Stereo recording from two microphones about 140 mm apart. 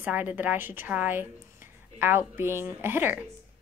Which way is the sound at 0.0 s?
10° right (ahead or behind).